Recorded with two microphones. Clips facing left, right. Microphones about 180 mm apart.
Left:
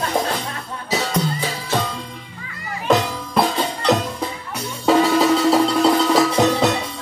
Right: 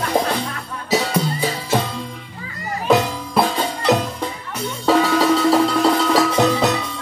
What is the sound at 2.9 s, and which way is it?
Music, centre (ahead or behind).